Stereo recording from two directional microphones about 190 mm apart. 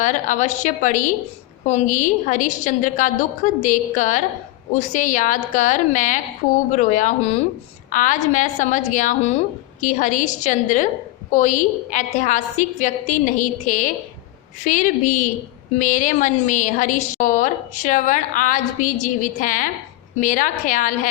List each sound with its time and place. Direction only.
0.0 s a woman's voice: 40° left (ahead or behind)